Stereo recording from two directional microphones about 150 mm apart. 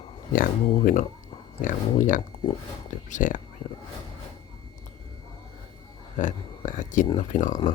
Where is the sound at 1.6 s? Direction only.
60° left (ahead or behind).